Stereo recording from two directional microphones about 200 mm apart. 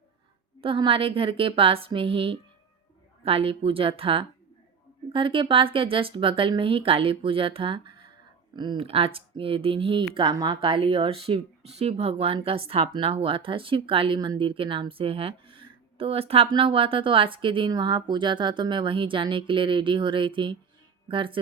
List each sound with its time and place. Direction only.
0.6 s speech: 25° right (ahead or behind)